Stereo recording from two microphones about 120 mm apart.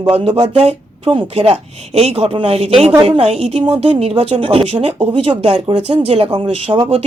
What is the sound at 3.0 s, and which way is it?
Speech, 40° right (ahead or behind).